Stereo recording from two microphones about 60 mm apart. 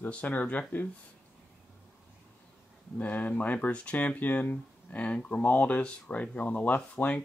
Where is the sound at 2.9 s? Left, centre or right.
Left.